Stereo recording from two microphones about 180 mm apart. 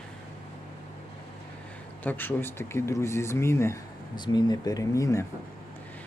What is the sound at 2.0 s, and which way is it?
Speech, 10° left (ahead or behind).